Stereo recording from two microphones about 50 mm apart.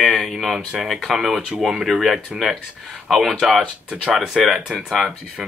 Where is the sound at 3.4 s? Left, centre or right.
Centre.